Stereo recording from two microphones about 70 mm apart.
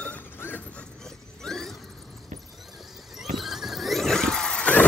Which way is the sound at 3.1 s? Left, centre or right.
Centre.